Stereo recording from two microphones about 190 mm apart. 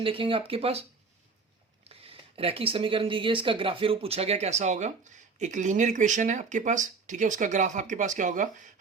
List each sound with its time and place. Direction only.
0.0 s speech: 30° right (ahead or behind)